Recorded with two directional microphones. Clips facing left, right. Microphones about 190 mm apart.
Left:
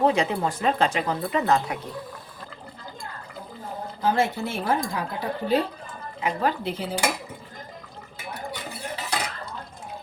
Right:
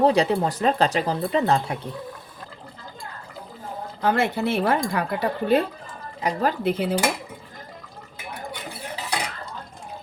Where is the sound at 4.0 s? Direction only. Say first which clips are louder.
Right 2 dB; 65° right (ahead or behind).